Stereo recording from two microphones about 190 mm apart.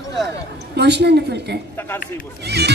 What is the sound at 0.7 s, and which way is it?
Speech, 60° right (ahead or behind).